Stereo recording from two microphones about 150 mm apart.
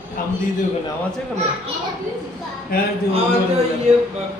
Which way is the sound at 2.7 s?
80° left.